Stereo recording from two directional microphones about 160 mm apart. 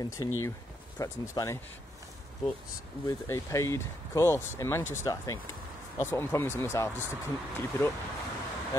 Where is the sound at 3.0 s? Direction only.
20° left (ahead or behind).